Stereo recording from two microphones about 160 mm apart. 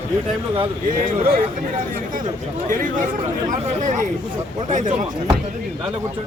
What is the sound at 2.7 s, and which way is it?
Speech, 55° right (ahead or behind).